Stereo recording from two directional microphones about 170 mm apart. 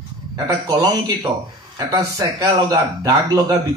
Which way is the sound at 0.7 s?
25° right (ahead or behind).